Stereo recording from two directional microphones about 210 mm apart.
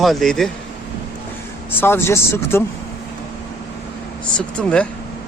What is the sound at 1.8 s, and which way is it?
Speech, 10° left (ahead or behind).